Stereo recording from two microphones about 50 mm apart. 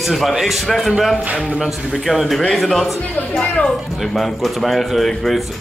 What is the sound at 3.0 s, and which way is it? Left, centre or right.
Speech, left.